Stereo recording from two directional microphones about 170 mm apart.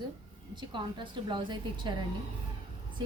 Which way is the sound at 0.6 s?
30° right (ahead or behind).